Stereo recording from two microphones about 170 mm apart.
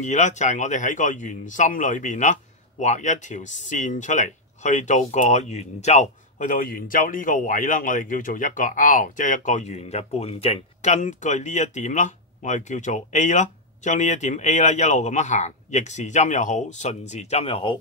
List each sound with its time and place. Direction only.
0.0 s speech: 45° left (ahead or behind)